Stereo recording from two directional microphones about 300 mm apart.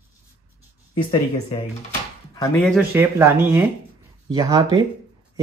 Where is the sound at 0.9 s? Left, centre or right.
Centre.